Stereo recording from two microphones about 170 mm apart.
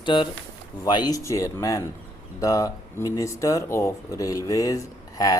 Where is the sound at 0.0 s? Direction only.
25° left (ahead or behind).